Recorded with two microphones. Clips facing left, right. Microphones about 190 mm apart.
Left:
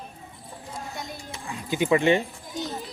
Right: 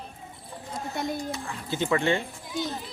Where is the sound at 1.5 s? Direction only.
15° left (ahead or behind).